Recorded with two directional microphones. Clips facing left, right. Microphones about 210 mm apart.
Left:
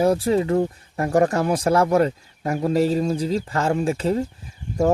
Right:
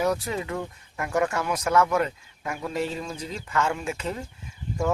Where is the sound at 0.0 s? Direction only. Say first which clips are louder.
Left 8 dB; 30° left (ahead or behind).